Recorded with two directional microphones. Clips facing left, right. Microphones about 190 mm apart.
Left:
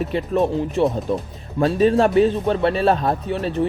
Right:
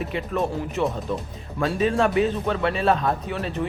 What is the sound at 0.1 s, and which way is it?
Speech, 35° left (ahead or behind).